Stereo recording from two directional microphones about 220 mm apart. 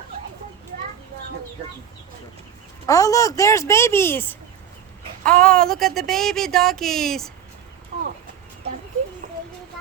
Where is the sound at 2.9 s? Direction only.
15° left (ahead or behind).